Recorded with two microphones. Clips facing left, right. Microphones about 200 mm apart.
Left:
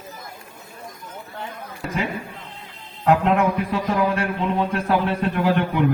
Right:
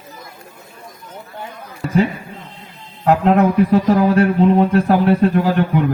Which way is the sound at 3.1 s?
35° right (ahead or behind).